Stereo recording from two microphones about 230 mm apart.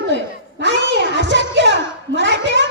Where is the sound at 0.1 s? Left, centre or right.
Right.